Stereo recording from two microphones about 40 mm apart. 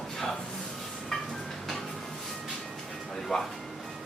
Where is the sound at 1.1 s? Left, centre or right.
Centre.